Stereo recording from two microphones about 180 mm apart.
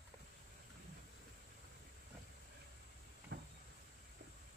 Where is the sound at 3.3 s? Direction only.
70° right (ahead or behind).